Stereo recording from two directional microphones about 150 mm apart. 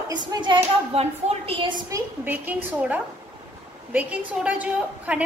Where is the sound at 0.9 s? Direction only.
45° right (ahead or behind).